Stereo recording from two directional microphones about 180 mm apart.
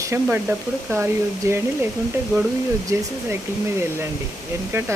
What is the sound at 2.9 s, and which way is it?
Speech, 15° right (ahead or behind).